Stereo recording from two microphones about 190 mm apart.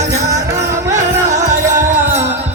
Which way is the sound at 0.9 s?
40° right (ahead or behind).